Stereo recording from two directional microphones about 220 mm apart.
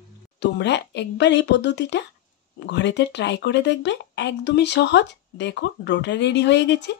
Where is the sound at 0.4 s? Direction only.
50° left (ahead or behind).